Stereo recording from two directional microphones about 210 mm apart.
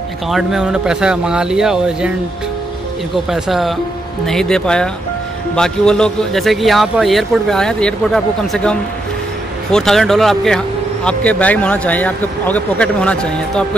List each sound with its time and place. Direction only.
0.3 s a man's voice: centre (ahead or behind)
3.3 s a man's voice: centre (ahead or behind)